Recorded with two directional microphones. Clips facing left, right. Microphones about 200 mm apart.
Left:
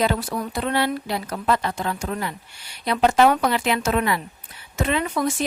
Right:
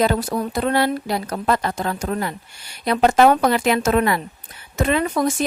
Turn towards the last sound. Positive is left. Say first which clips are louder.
# right 3 dB
turn(degrees=-40)  # may be behind; listen again after turning